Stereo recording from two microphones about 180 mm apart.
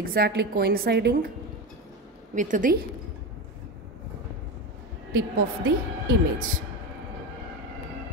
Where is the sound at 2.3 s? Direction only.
45° right (ahead or behind).